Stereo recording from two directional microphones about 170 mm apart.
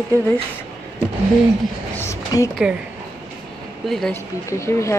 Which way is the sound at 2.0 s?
15° left (ahead or behind).